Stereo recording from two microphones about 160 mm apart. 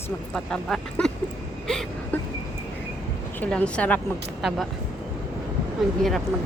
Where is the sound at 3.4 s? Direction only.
10° left (ahead or behind).